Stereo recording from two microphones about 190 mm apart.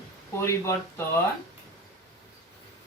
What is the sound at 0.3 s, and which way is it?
Speech, 15° left (ahead or behind).